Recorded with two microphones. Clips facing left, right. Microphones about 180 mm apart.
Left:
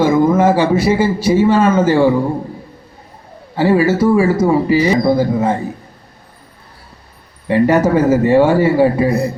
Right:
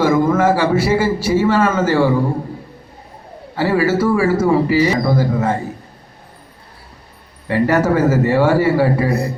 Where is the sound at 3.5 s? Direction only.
20° left (ahead or behind).